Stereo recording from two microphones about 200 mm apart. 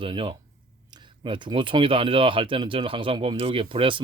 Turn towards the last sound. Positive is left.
turn(degrees=-25)  # may be behind; listen again after turning